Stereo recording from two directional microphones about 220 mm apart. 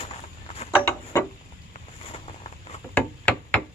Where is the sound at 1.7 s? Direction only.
25° left (ahead or behind).